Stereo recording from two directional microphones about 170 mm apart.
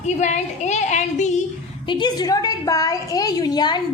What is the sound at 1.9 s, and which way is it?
A woman's voice, 25° left (ahead or behind).